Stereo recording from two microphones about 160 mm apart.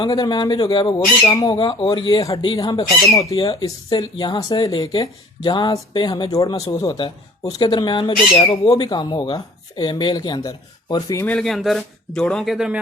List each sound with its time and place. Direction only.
0.0 s speech: 25° left (ahead or behind)
2.2 s speech: 20° left (ahead or behind)
11.3 s speech: 5° left (ahead or behind)